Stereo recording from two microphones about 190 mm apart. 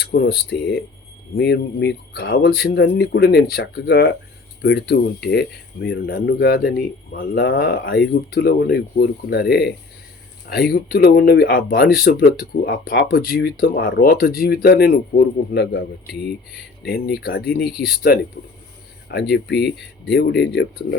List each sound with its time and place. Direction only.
0.0 s speech: 55° left (ahead or behind)
16.8 s speech: 55° left (ahead or behind)